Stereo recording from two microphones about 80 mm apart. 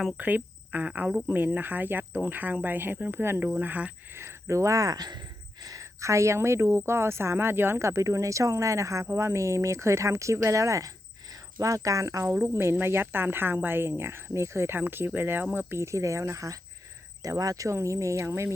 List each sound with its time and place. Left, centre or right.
0.2 s speech: right
3.6 s speech: centre
4.1 s speech: right
12.3 s speech: right